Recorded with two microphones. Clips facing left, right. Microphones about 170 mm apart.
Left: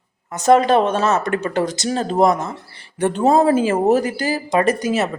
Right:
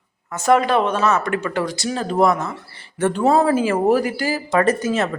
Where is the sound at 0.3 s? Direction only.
20° left (ahead or behind).